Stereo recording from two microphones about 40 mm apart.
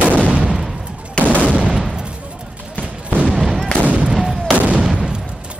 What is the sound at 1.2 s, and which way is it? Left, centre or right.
Gunshot, left.